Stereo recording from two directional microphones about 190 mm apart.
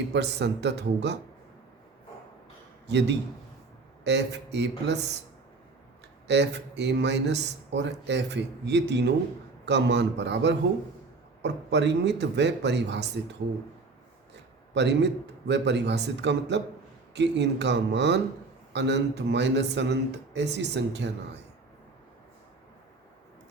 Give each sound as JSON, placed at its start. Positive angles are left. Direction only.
{"t": 0.1, "sound": "speech", "side_deg": -65}
{"t": 2.8, "sound": "speech", "side_deg": -65}
{"t": 6.2, "sound": "a man's voice", "side_deg": -65}
{"t": 14.7, "sound": "speech", "side_deg": -65}